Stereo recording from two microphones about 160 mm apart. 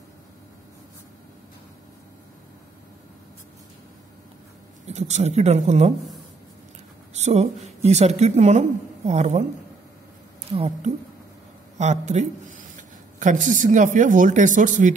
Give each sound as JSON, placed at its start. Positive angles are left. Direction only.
{"t": 4.8, "sound": "speech", "side_deg": -45}
{"t": 7.2, "sound": "a sound", "side_deg": -45}
{"t": 7.6, "sound": "speech", "side_deg": -45}
{"t": 10.5, "sound": "speech", "side_deg": -40}